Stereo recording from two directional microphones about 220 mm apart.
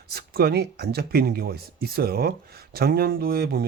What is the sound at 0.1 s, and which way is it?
A man's voice, 45° right (ahead or behind).